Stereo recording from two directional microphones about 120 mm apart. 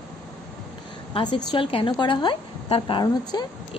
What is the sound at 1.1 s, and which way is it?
A woman's voice, 40° left (ahead or behind).